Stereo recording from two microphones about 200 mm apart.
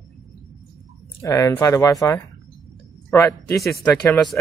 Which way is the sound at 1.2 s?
15° left (ahead or behind).